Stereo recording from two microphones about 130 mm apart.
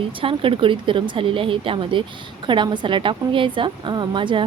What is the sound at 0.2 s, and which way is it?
Speech, 40° right (ahead or behind).